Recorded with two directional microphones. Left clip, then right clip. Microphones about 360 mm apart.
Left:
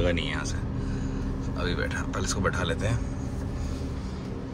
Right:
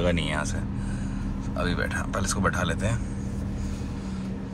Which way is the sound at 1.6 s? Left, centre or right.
Centre.